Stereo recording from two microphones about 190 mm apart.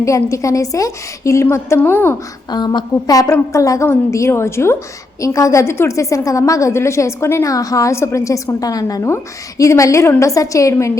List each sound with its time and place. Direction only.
0.0 s a woman's voice: 15° left (ahead or behind)
2.5 s a woman's voice: 20° left (ahead or behind)